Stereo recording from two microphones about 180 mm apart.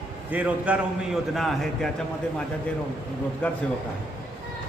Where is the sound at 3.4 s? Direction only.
5° left (ahead or behind).